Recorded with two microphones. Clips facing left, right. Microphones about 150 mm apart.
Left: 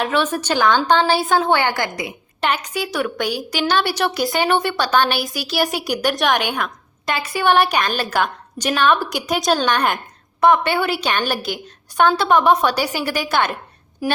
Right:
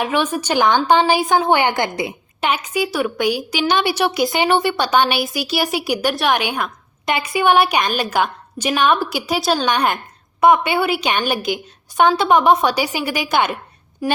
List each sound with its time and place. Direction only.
0.0 s a woman's voice: 10° right (ahead or behind)
2.4 s a woman's voice: 10° right (ahead or behind)
7.0 s a woman's voice: 15° right (ahead or behind)
14.0 s a woman's voice: 5° left (ahead or behind)